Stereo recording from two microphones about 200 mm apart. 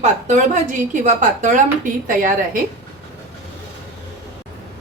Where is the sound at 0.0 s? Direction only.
40° right (ahead or behind).